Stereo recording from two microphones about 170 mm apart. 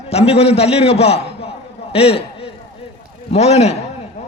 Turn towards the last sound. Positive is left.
turn(degrees=40)  # may be behind; listen again after turning